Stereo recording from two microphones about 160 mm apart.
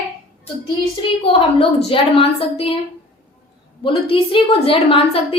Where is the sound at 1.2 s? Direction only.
35° left (ahead or behind).